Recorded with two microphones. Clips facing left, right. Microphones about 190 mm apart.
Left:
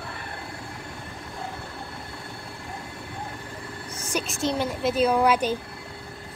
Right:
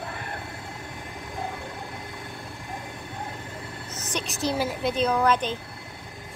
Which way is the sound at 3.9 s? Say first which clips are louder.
Left 3 dB; 10° left (ahead or behind).